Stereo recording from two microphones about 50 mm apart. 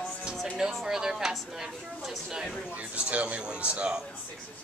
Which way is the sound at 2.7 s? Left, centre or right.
Right.